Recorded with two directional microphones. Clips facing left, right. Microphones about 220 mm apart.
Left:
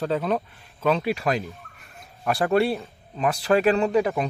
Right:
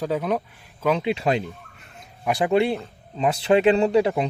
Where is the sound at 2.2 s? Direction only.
15° right (ahead or behind).